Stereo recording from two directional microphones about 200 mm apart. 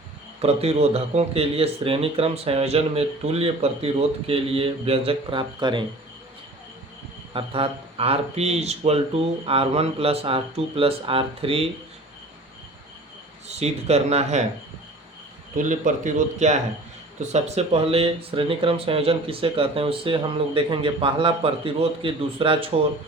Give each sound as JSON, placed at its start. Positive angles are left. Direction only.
{"t": 0.4, "sound": "speech", "side_deg": -30}
{"t": 7.3, "sound": "speech", "side_deg": -30}
{"t": 13.5, "sound": "speech", "side_deg": -35}
{"t": 15.5, "sound": "speech", "side_deg": -40}